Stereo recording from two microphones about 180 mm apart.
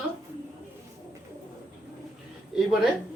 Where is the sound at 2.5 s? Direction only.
5° right (ahead or behind).